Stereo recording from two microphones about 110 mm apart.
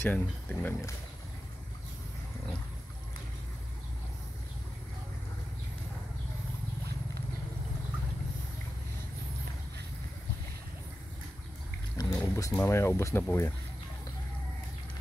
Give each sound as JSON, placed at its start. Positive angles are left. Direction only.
{"t": 0.0, "sound": "speech", "side_deg": 15}
{"t": 12.0, "sound": "a sound", "side_deg": 30}
{"t": 12.5, "sound": "speech", "side_deg": 25}